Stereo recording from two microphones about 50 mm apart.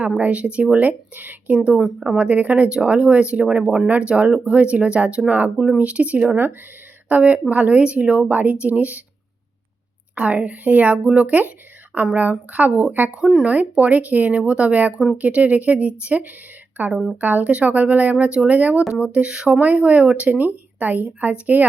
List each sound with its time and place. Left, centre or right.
0.2 s speech: right
1.7 s speech: centre
3.6 s speech: centre
3.8 s speech: right
5.5 s speech: centre
10.2 s speech: right
13.1 s speech: centre
13.4 s speech: right